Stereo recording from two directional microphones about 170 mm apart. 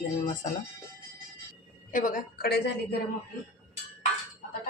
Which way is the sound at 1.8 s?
50° left (ahead or behind).